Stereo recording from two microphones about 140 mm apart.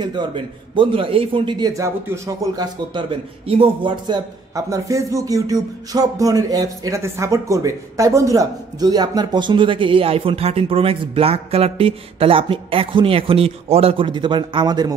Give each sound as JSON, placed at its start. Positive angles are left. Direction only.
{"t": 0.0, "sound": "a man's voice", "side_deg": -35}
{"t": 1.7, "sound": "a man's voice", "side_deg": -20}